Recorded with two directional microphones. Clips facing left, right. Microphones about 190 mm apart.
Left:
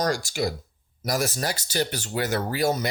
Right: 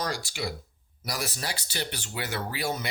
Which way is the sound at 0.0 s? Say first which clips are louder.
Left 7 dB; 45° left (ahead or behind).